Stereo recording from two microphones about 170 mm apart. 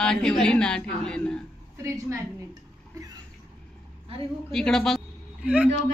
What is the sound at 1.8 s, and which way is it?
Speech, 15° right (ahead or behind).